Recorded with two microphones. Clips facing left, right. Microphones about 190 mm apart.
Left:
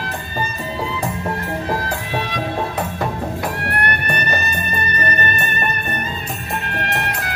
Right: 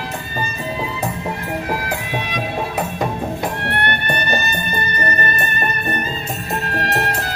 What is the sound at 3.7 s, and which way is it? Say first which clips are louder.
Music: right 1 dB; 25° right (ahead or behind).